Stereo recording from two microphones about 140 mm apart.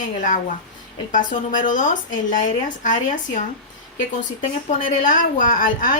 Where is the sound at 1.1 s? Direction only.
70° left (ahead or behind).